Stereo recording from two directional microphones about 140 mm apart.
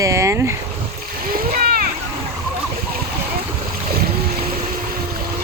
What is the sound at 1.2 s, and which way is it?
Splash, 90° right.